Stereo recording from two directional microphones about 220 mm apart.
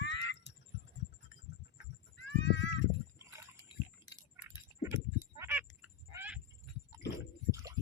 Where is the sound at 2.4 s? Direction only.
55° left (ahead or behind).